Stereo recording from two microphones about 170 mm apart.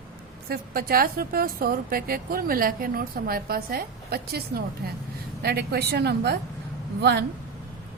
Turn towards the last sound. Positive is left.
turn(degrees=-75)  # may be behind; listen again after turning